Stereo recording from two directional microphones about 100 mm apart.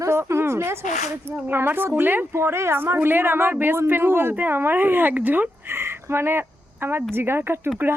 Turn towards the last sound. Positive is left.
turn(degrees=-20)  # may be behind; listen again after turning